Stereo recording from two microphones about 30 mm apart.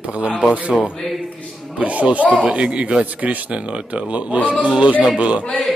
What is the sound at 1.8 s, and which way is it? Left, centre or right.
Speech, right.